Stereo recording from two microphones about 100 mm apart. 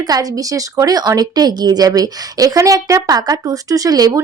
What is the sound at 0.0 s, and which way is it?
A woman's voice, 40° right (ahead or behind).